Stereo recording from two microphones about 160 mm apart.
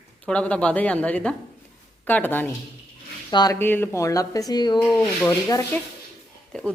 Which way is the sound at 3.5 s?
15° left (ahead or behind).